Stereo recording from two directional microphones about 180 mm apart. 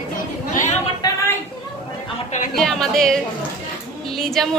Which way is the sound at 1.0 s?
20° left (ahead or behind).